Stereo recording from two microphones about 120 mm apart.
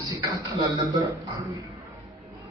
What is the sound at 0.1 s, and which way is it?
Speech, 30° right (ahead or behind).